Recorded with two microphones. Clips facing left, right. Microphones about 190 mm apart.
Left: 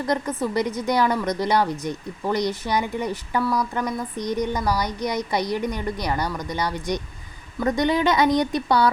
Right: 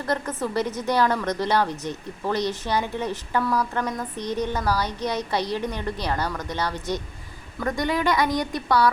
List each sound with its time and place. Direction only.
0.0 s a woman's voice: 10° left (ahead or behind)